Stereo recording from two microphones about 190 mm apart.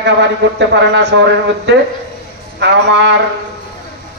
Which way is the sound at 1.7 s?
65° right (ahead or behind).